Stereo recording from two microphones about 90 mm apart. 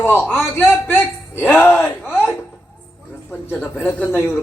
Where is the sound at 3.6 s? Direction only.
25° left (ahead or behind).